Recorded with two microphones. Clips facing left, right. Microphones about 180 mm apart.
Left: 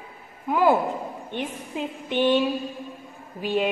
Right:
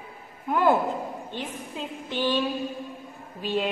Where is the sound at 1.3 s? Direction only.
20° left (ahead or behind).